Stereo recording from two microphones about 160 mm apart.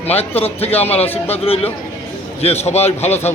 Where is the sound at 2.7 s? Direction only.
40° left (ahead or behind).